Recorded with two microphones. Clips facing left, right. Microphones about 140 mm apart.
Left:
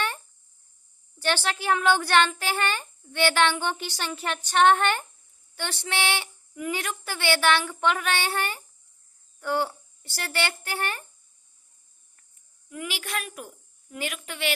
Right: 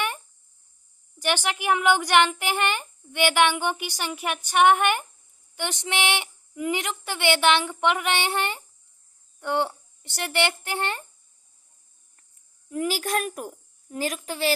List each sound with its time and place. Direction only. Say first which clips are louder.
1.2 s a woman's voice: right 1 dB; 15° right (ahead or behind)
12.6 s a woman's voice: right 8 dB; 40° right (ahead or behind)